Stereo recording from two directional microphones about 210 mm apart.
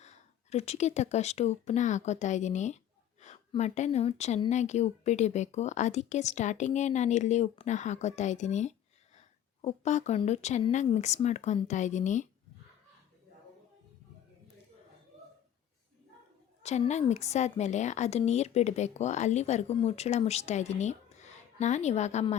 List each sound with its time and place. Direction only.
0.0 s speech: 30° left (ahead or behind)
16.6 s speech: 30° left (ahead or behind)